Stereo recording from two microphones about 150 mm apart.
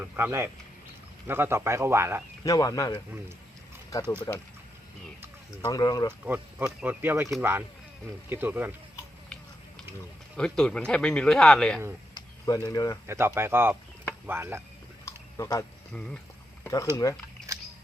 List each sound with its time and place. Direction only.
0.0 s speech: 15° right (ahead or behind)
2.4 s speech: 20° left (ahead or behind)
3.9 s speech: 20° left (ahead or behind)
5.6 s speech: 25° left (ahead or behind)
6.2 s speech: 10° right (ahead or behind)
8.3 s speech: 15° right (ahead or behind)
10.3 s speech: 5° left (ahead or behind)
12.1 s a sound: 25° left (ahead or behind)
13.1 s speech: 15° right (ahead or behind)
15.0 s a sound: 25° left (ahead or behind)
15.9 s speech: 5° left (ahead or behind)
17.0 s speech: 25° left (ahead or behind)
17.5 s a sound: 20° right (ahead or behind)